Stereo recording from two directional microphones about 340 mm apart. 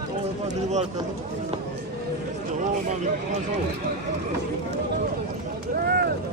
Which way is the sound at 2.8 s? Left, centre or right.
Right.